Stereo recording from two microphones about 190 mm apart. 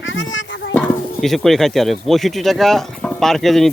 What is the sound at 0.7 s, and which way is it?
Speech, 5° left (ahead or behind).